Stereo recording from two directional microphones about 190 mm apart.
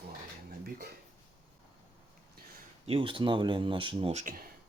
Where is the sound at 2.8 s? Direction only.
30° right (ahead or behind).